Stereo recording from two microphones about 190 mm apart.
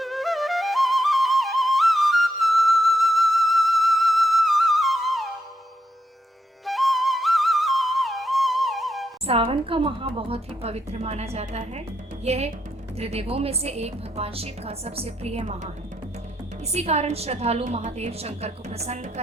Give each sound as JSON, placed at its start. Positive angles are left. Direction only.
{"t": 0.0, "sound": "flute", "side_deg": 0}
{"t": 6.7, "sound": "music", "side_deg": 0}
{"t": 9.2, "sound": "a woman's voice", "side_deg": -30}
{"t": 16.7, "sound": "a woman's voice", "side_deg": -35}